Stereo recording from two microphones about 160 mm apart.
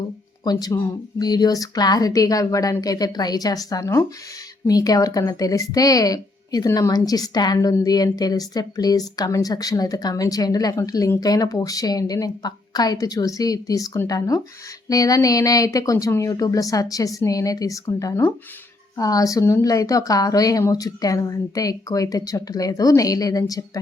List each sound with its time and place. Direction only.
0.4 s a woman's voice: 20° left (ahead or behind)